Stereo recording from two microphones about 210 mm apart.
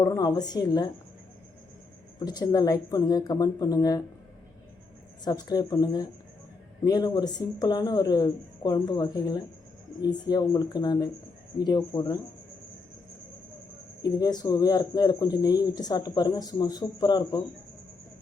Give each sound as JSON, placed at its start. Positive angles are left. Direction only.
{"t": 0.0, "sound": "speech", "side_deg": 15}
{"t": 2.1, "sound": "speech", "side_deg": 20}
{"t": 5.2, "sound": "speech", "side_deg": 20}
{"t": 14.0, "sound": "speech", "side_deg": 15}